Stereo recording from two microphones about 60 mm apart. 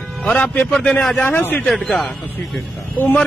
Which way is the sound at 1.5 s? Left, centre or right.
Centre.